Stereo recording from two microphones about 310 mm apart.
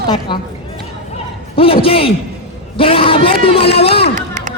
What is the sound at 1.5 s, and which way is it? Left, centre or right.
A man's voice, centre.